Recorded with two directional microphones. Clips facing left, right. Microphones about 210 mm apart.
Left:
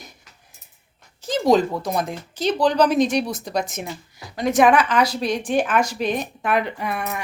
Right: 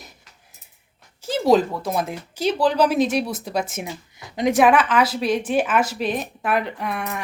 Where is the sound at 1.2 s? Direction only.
5° right (ahead or behind).